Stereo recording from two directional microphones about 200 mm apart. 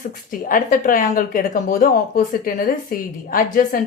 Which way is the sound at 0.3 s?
45° left (ahead or behind).